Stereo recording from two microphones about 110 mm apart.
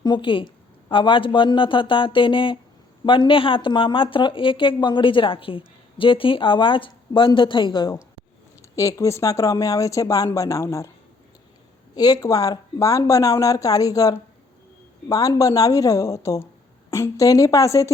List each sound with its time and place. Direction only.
0.0 s speech: 45° left (ahead or behind)
8.7 s speech: 30° left (ahead or behind)
11.9 s speech: 35° left (ahead or behind)